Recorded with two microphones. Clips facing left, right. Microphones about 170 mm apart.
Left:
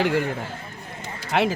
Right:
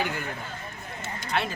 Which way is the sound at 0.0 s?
85° left.